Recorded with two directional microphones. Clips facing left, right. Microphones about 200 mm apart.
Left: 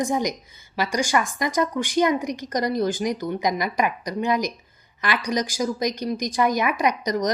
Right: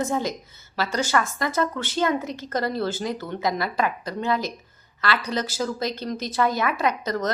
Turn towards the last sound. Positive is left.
turn(degrees=15)  # may be behind; listen again after turning